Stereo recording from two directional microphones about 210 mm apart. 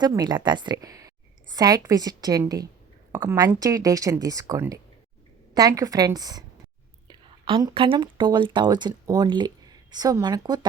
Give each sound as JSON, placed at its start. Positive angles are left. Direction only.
{"t": 0.0, "sound": "speech", "side_deg": -20}